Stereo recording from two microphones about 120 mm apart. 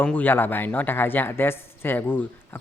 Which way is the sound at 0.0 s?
15° left (ahead or behind).